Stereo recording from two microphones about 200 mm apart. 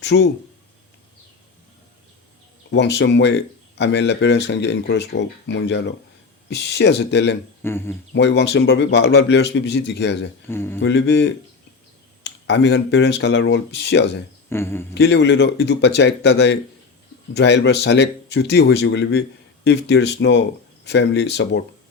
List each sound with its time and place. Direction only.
0.0 s speech: 60° left (ahead or behind)
2.6 s speech: 60° left (ahead or behind)
7.6 s speech: 10° left (ahead or behind)
8.1 s speech: 60° left (ahead or behind)
10.5 s speech: 10° left (ahead or behind)
10.8 s speech: 60° left (ahead or behind)
14.5 s speech: 10° left (ahead or behind)
14.9 s speech: 55° left (ahead or behind)